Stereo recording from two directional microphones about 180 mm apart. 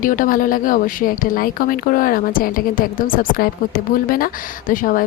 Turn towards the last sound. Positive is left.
turn(degrees=50)  # may be behind; listen again after turning